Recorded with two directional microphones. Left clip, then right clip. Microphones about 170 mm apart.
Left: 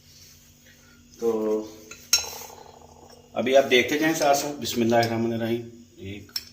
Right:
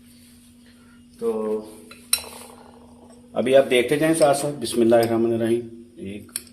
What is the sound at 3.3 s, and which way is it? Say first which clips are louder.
A man's voice: right 2 dB; 50° right (ahead or behind).